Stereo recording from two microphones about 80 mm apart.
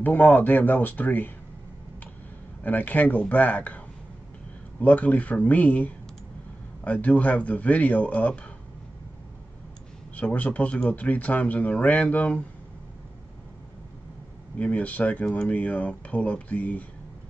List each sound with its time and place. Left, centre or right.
0.0 s speech: left
2.6 s speech: left
10.1 s speech: centre
14.6 s speech: centre